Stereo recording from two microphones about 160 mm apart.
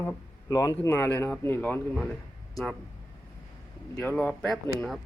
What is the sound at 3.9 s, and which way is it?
Speech, 15° left (ahead or behind).